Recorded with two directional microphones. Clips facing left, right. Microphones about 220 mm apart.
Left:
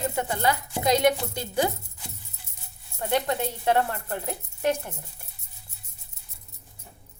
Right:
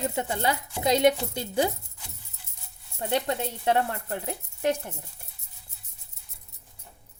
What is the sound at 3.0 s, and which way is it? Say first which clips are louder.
Speech: left 1 dB; 25° right (ahead or behind).